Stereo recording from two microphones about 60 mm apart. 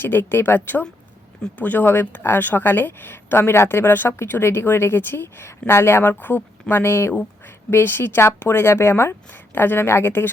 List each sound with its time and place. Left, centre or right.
0.0 s speech: left